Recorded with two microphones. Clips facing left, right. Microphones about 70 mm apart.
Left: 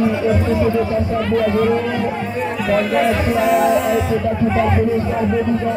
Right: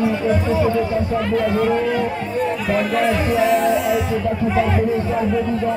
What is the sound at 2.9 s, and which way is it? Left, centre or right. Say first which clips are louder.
Music: left 2 dB; centre.